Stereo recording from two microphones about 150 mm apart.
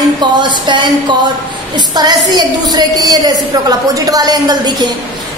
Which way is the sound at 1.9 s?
25° right (ahead or behind).